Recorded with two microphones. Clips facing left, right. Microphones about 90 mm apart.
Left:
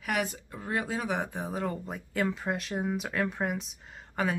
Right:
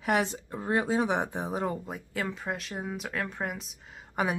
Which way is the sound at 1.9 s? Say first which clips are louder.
Left 3 dB; centre (ahead or behind).